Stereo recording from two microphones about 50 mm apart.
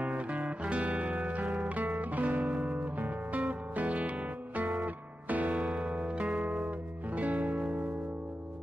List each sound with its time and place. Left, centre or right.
0.0 s music: right